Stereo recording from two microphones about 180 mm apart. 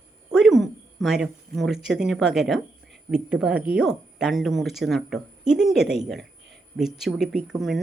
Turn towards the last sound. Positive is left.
turn(degrees=0)  # may be behind; listen again after turning